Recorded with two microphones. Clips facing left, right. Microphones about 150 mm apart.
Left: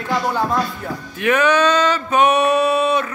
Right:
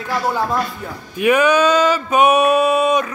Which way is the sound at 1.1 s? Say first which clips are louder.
Right 2 dB; 10° right (ahead or behind).